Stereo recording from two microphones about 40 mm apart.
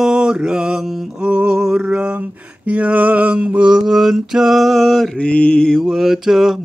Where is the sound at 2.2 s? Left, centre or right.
Right.